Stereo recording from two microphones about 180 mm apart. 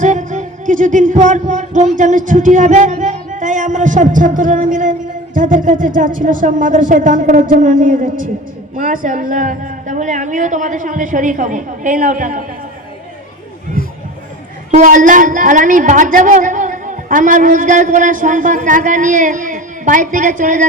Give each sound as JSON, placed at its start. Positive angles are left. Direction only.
{"t": 0.0, "sound": "music", "side_deg": -45}
{"t": 2.0, "sound": "speech", "side_deg": -45}
{"t": 13.8, "sound": "a sound", "side_deg": 55}
{"t": 14.7, "sound": "speech", "side_deg": -45}